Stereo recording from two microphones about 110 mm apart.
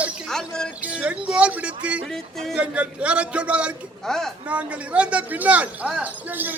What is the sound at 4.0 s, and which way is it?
Speech, 5° left (ahead or behind).